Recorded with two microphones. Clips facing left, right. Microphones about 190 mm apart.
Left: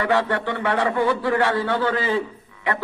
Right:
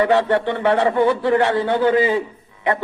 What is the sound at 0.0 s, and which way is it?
A man's voice, 25° right (ahead or behind).